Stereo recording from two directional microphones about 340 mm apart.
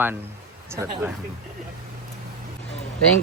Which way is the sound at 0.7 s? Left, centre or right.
Centre.